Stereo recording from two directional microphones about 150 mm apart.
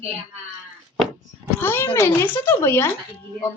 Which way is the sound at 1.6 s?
15° left (ahead or behind).